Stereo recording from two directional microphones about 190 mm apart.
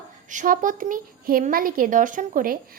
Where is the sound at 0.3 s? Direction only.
45° right (ahead or behind).